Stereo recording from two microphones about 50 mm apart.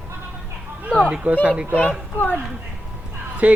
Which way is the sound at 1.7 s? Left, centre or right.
Left.